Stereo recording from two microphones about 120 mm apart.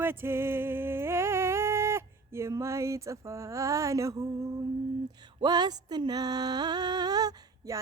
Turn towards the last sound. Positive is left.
turn(degrees=-30)  # may be behind; listen again after turning